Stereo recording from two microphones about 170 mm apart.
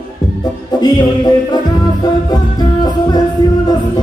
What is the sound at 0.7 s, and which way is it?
Music, 25° left (ahead or behind).